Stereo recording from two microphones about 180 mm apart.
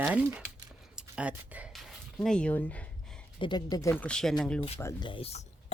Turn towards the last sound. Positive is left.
turn(degrees=35)  # may be behind; listen again after turning